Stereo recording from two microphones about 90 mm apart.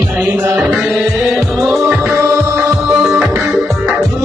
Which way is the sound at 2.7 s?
5° right (ahead or behind).